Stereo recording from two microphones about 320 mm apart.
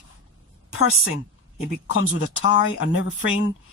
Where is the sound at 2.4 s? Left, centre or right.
Left.